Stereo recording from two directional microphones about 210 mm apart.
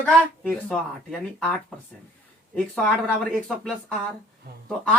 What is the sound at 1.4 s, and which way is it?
Speech, 5° left (ahead or behind).